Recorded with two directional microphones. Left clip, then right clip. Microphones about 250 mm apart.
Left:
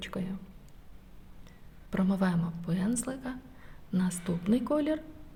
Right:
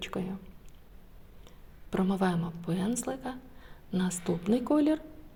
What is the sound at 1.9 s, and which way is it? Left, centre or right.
A woman's voice, centre.